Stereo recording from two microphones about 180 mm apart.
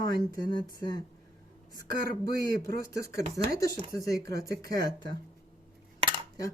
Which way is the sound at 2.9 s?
20° left (ahead or behind).